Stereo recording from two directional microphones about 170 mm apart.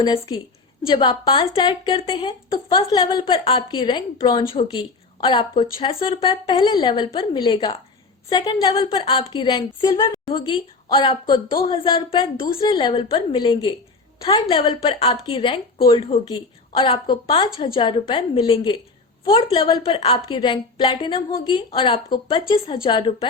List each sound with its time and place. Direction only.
0.0 s a woman's voice: 25° left (ahead or behind)